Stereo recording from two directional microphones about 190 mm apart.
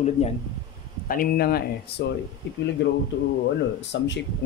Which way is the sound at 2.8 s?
65° left (ahead or behind).